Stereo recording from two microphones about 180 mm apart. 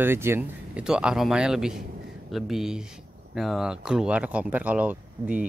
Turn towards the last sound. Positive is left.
turn(degrees=-10)  # may be behind; listen again after turning